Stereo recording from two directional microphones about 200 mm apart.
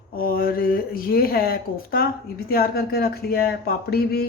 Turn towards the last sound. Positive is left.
turn(degrees=50)  # may be behind; listen again after turning